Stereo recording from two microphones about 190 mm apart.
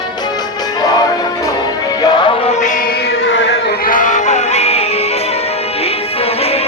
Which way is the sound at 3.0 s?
70° left (ahead or behind).